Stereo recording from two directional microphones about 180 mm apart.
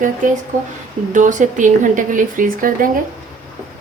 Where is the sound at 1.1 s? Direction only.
45° right (ahead or behind).